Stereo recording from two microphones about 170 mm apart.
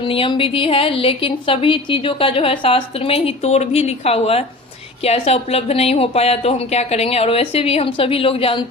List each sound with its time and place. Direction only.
0.0 s a woman's voice: 30° left (ahead or behind)